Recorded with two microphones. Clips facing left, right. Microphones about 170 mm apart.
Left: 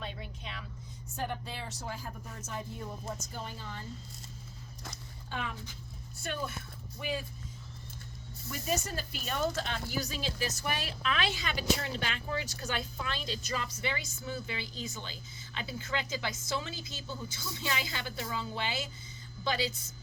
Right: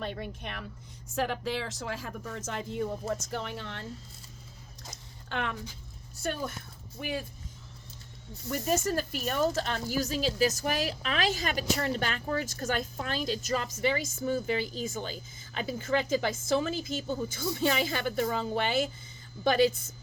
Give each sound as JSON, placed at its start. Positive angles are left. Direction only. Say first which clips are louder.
{"t": 0.0, "sound": "a sound", "louder": "right 6 dB", "side_deg": -60}
{"t": 1.1, "sound": "speech", "louder": "right 7 dB", "side_deg": -90}
{"t": 5.3, "sound": "speech", "louder": "right 5 dB", "side_deg": -70}
{"t": 8.4, "sound": "speech", "louder": "right 6 dB", "side_deg": -50}